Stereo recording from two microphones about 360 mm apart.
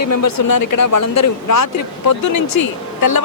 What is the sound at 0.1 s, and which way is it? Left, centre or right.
Speech, left.